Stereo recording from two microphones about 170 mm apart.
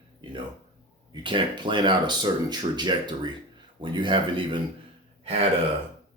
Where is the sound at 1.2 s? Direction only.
30° right (ahead or behind).